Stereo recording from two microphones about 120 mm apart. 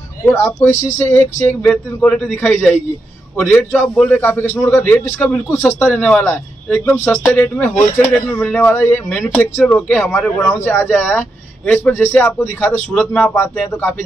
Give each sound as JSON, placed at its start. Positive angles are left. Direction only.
{"t": 0.2, "sound": "speech", "side_deg": 20}
{"t": 5.6, "sound": "a man's voice", "side_deg": 0}
{"t": 5.9, "sound": "speech", "side_deg": 10}
{"t": 12.9, "sound": "a man's voice", "side_deg": 5}